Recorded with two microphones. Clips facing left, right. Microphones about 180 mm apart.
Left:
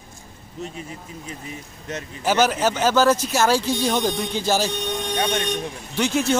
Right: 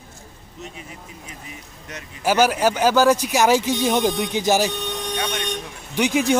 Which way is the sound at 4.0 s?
Centre (ahead or behind).